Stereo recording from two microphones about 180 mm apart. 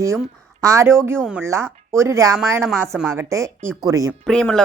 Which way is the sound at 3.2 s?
15° right (ahead or behind).